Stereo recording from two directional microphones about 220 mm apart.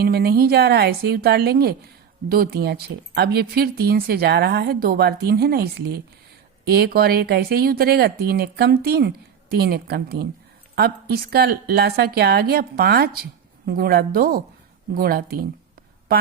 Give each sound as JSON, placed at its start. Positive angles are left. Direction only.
{"t": 0.0, "sound": "speech", "side_deg": -45}